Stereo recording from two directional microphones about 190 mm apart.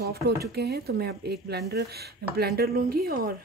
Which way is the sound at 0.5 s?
60° right (ahead or behind).